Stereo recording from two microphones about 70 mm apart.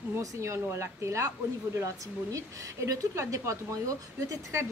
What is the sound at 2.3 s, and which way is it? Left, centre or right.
A woman's voice, right.